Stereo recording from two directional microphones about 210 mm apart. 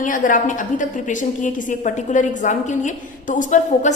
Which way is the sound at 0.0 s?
40° left (ahead or behind).